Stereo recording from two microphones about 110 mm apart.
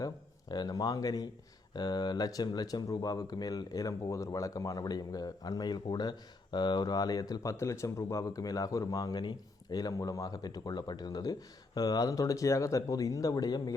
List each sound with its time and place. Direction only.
0.0 s speech: 40° left (ahead or behind)